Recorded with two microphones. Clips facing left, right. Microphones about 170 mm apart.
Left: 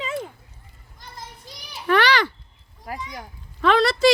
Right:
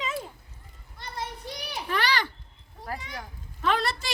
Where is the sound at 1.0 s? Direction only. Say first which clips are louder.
Right 5 dB; 65° right (ahead or behind).